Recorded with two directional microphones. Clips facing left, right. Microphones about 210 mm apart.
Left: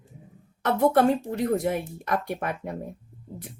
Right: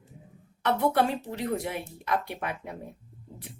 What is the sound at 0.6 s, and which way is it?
Speech, 45° left (ahead or behind).